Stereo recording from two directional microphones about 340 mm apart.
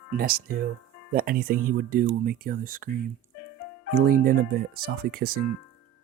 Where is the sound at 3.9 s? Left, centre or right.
Right.